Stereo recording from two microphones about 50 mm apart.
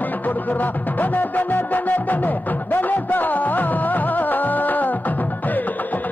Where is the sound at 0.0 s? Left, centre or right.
Left.